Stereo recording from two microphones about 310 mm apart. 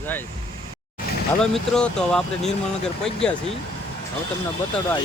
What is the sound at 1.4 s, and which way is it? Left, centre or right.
Speech, centre.